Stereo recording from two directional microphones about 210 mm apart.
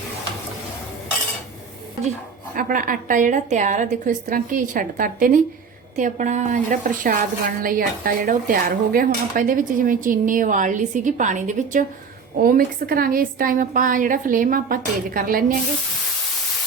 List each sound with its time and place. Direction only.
2.6 s a woman's voice: 40° right (ahead or behind)